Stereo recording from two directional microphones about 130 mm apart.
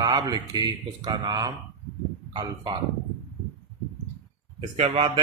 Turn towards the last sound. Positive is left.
turn(degrees=-40)  # may be behind; listen again after turning